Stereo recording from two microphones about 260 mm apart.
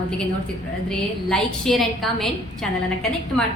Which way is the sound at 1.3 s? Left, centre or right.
Centre.